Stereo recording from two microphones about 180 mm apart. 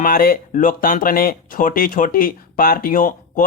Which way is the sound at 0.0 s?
50° left (ahead or behind).